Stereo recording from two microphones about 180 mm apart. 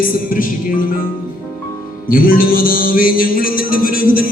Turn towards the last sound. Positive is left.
turn(degrees=55)  # may be behind; listen again after turning